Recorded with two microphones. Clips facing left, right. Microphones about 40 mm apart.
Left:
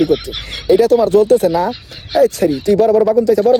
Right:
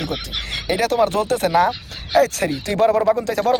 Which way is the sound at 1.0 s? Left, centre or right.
Right.